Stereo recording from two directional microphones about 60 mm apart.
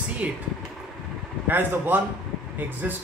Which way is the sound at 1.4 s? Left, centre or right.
Right.